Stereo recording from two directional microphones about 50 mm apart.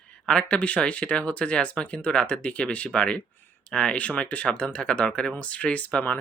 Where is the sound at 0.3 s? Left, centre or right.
Centre.